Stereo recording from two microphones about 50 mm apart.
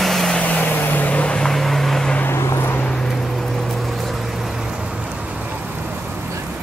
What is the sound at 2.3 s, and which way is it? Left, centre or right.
Vehicle, left.